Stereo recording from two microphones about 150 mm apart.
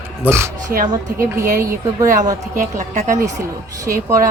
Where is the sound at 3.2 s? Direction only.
20° right (ahead or behind).